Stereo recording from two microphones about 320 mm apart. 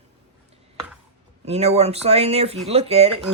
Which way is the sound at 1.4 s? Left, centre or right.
Centre.